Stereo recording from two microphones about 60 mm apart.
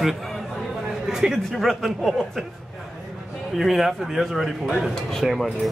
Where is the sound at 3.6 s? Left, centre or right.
Centre.